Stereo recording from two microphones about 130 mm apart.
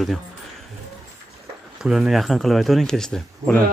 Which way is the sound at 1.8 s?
5° right (ahead or behind).